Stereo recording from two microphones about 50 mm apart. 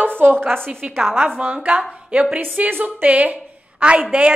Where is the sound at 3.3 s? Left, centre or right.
Right.